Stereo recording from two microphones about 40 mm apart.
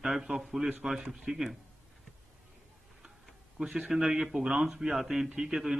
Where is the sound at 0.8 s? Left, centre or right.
Centre.